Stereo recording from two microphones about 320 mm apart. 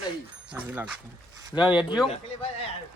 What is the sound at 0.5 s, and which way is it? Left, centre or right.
Speech, centre.